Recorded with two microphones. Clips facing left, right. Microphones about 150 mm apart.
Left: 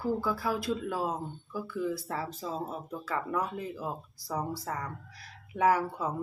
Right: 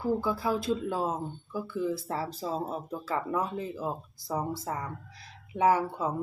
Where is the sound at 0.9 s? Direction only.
25° right (ahead or behind).